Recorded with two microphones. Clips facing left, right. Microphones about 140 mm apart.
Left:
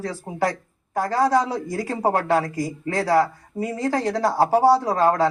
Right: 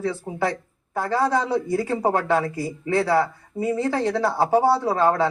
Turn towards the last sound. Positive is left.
turn(degrees=40)  # may be behind; listen again after turning